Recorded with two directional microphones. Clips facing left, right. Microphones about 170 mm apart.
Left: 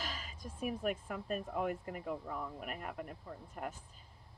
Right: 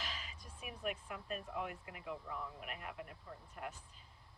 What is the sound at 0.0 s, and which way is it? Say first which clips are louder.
Speech: left 5 dB; 45° left (ahead or behind).